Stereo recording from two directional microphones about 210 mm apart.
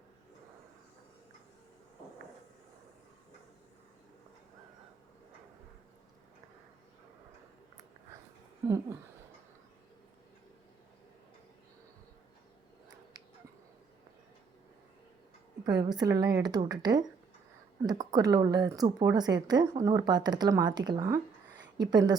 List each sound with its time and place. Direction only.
8.6 s speech: 15° right (ahead or behind)
15.6 s speech: 20° right (ahead or behind)